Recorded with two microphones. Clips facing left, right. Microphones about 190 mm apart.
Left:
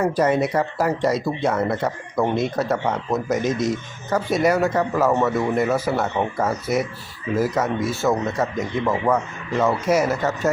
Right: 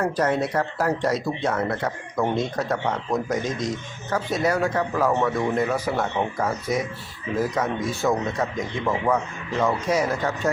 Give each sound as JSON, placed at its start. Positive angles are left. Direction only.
{"t": 0.0, "sound": "speech", "side_deg": 10}